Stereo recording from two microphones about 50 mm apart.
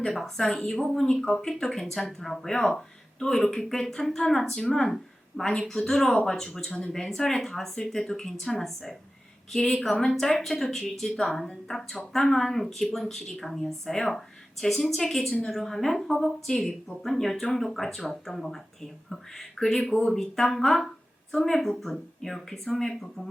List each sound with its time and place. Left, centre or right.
0.0 s speech: centre